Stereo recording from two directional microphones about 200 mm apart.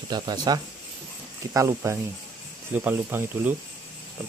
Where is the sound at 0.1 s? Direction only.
20° right (ahead or behind).